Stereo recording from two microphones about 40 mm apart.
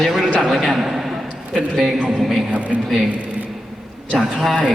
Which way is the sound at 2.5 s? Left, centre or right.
Right.